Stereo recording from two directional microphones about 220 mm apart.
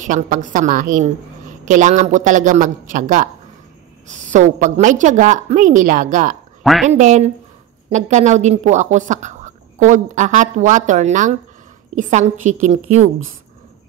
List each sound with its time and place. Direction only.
0.0 s speech: 35° right (ahead or behind)
6.6 s speech: centre (ahead or behind)
6.9 s speech: 30° right (ahead or behind)